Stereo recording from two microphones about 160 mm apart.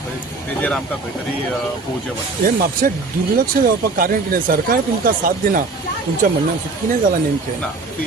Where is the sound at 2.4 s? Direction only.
60° right (ahead or behind).